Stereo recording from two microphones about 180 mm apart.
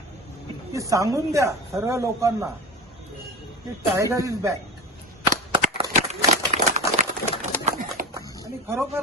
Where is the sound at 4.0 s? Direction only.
15° right (ahead or behind).